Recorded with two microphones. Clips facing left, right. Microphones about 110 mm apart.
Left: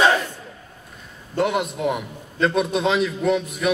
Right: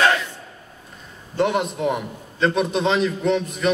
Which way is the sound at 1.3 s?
Centre (ahead or behind).